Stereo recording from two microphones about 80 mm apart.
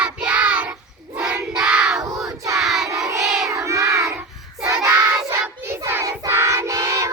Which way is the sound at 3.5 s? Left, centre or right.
Right.